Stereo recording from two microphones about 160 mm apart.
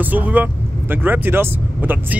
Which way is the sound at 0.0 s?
10° right (ahead or behind).